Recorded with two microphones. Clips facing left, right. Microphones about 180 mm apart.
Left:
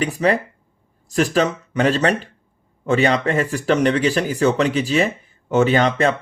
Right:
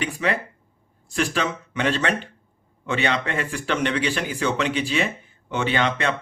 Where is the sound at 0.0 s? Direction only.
40° left (ahead or behind).